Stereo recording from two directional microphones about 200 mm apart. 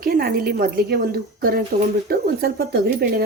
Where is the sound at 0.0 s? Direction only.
50° right (ahead or behind).